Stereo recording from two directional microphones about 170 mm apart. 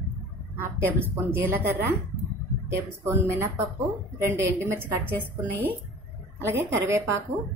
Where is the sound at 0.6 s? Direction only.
10° right (ahead or behind).